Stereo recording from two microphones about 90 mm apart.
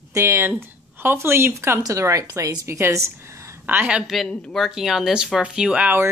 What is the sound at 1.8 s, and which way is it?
Speech, 40° right (ahead or behind).